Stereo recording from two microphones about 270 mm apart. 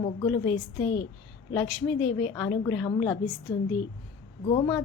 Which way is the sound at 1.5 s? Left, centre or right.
Centre.